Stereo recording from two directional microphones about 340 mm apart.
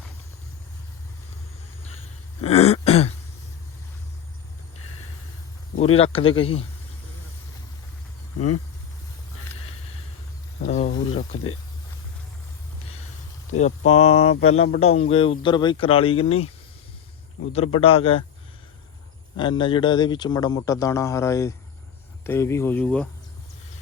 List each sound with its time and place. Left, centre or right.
2.4 s throat clearing: centre
5.8 s speech: centre
8.4 s speech: left
10.6 s a sound: centre
13.8 s speech: left
14.7 s speech: centre
17.4 s speech: left
17.7 s speech: centre
19.4 s speech: centre